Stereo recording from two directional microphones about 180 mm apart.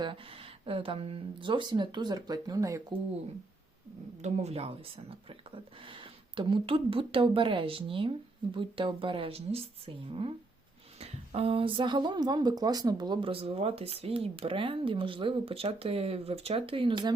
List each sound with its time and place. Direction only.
0.6 s speech: 30° right (ahead or behind)
4.2 s speech: 40° right (ahead or behind)